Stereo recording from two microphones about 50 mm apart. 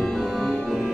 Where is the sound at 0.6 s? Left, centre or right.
Centre.